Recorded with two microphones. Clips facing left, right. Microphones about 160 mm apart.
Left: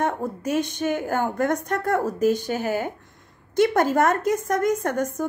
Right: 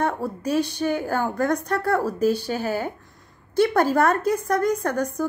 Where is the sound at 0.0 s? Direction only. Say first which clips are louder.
Even; 20° left (ahead or behind).